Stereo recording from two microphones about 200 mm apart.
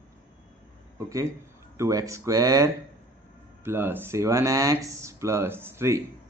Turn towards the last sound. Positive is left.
turn(degrees=-15)  # may be behind; listen again after turning